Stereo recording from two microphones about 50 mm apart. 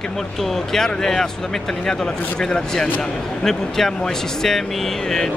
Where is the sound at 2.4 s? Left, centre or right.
Centre.